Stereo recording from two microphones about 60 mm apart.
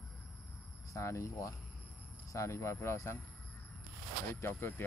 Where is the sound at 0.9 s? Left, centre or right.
Left.